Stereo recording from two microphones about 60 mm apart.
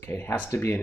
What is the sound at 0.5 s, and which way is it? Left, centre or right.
Speech, left.